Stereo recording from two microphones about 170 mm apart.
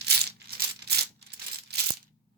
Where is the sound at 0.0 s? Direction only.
75° right (ahead or behind).